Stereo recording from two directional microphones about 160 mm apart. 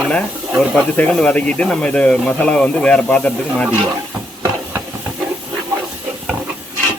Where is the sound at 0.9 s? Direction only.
5° left (ahead or behind).